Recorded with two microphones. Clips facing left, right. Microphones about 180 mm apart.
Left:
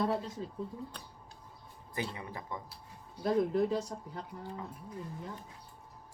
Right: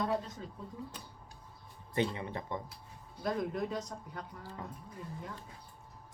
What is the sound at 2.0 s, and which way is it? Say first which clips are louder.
Speech: right 5 dB; 25° right (ahead or behind).